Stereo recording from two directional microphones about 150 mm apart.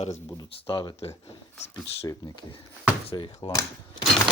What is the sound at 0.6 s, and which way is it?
Speech, 35° left (ahead or behind).